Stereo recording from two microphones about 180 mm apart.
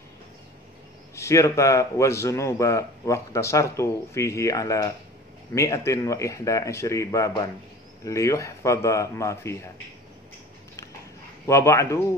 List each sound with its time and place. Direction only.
1.1 s a man's voice: 15° left (ahead or behind)
11.4 s a man's voice: 15° left (ahead or behind)